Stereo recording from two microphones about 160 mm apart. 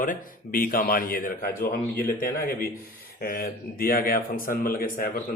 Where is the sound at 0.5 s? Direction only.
65° left (ahead or behind).